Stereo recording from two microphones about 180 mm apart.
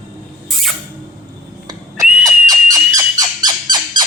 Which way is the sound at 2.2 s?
20° right (ahead or behind).